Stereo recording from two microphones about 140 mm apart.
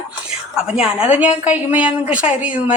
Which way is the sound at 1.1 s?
10° right (ahead or behind).